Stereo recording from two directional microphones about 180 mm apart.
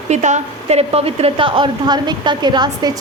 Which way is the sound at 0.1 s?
40° right (ahead or behind).